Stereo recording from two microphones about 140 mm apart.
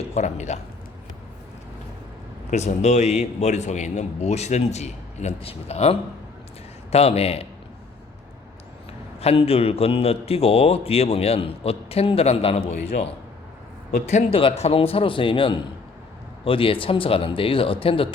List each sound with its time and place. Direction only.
0.1 s speech: 55° left (ahead or behind)
2.5 s a man's voice: 55° left (ahead or behind)
9.2 s a man's voice: 45° left (ahead or behind)
14.3 s speech: 45° left (ahead or behind)